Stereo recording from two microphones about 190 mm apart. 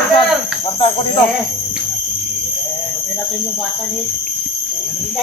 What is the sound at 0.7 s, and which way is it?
Speech, 30° left (ahead or behind).